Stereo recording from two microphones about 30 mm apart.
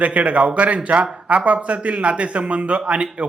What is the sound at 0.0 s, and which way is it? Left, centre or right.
A man's voice, right.